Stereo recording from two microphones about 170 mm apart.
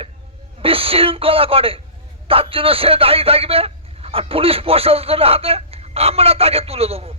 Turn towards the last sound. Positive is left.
turn(degrees=-35)  # may be behind; listen again after turning